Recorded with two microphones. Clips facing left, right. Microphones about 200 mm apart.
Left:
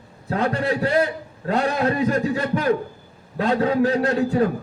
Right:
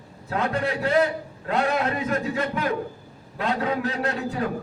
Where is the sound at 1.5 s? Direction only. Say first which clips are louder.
Left 3 dB; 35° left (ahead or behind).